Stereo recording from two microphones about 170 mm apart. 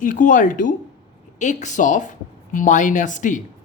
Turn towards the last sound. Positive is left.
turn(degrees=45)  # may be behind; listen again after turning